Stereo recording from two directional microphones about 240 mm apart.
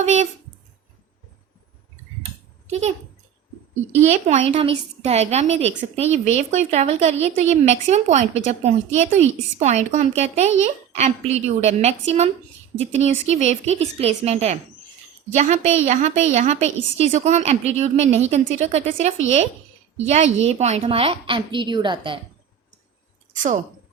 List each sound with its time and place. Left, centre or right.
0.0 s a woman's voice: right
2.6 s a child's voice: right
4.0 s a woman's voice: right